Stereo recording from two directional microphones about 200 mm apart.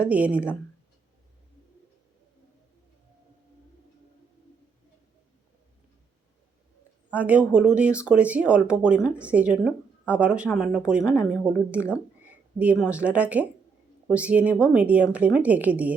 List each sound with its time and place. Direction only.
0.0 s a woman's voice: 5° right (ahead or behind)
7.1 s a woman's voice: 5° right (ahead or behind)